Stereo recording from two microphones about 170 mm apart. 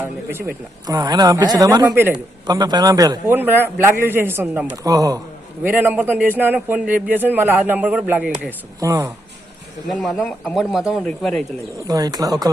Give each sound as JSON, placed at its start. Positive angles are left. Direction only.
{"t": 0.0, "sound": "a man's voice", "side_deg": -15}
{"t": 5.6, "sound": "a man's voice", "side_deg": -10}
{"t": 9.9, "sound": "speech", "side_deg": 5}
{"t": 11.9, "sound": "speech", "side_deg": -20}